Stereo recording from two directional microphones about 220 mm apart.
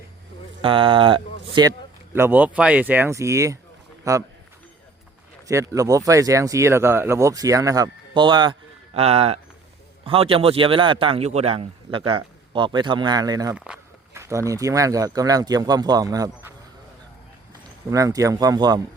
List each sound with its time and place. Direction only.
0.6 s a man's voice: 25° right (ahead or behind)
2.1 s speech: 10° right (ahead or behind)
5.5 s a man's voice: 15° right (ahead or behind)
17.9 s speech: 15° right (ahead or behind)